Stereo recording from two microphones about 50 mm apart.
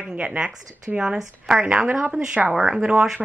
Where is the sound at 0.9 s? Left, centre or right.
Centre.